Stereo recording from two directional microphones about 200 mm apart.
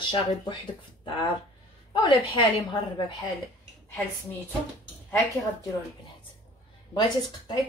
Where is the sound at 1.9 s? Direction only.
25° left (ahead or behind).